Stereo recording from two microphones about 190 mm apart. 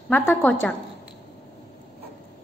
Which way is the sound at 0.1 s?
5° left (ahead or behind).